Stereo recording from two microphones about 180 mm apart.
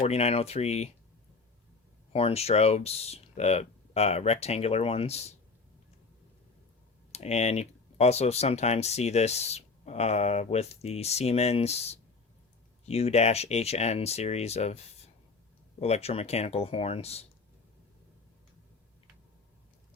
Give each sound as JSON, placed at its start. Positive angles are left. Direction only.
{"t": 0.0, "sound": "speech", "side_deg": 35}
{"t": 2.1, "sound": "speech", "side_deg": 35}
{"t": 7.1, "sound": "speech", "side_deg": 35}